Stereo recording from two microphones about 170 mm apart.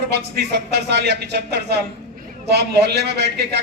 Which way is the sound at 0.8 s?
75° right (ahead or behind).